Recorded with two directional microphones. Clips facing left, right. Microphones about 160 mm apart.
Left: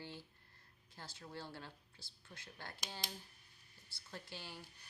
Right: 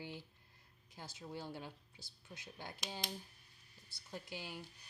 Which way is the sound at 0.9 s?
15° right (ahead or behind).